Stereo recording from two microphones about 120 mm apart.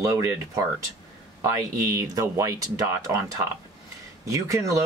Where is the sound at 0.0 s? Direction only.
25° right (ahead or behind).